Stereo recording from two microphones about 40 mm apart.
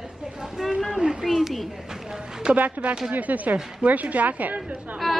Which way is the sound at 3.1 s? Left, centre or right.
Right.